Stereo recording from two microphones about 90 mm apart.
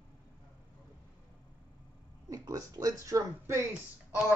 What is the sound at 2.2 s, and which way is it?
Speech, 40° right (ahead or behind).